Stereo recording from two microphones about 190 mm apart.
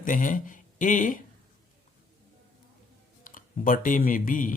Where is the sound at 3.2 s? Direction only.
45° left (ahead or behind).